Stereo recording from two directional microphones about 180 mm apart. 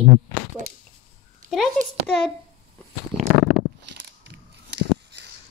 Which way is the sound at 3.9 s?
70° right (ahead or behind).